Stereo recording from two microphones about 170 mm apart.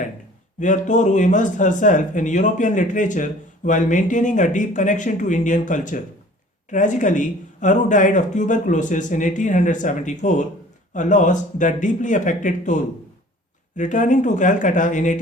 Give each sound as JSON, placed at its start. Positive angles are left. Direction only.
{"t": 0.6, "sound": "speech", "side_deg": 45}